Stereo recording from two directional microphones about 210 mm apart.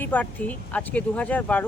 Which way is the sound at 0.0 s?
5° left (ahead or behind).